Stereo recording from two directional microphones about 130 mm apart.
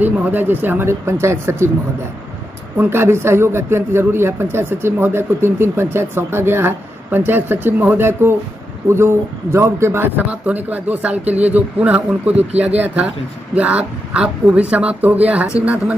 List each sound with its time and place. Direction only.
0.0 s a man's voice: 15° right (ahead or behind)
2.8 s a man's voice: 20° right (ahead or behind)